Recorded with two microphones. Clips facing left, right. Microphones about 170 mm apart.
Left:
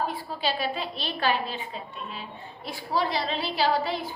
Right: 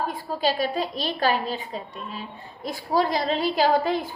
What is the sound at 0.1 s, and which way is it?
A woman's voice, 45° right (ahead or behind).